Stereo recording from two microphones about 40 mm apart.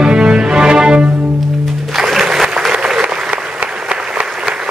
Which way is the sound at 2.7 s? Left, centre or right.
Centre.